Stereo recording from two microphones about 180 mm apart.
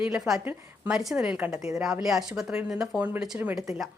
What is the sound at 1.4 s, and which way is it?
Speech, 15° right (ahead or behind).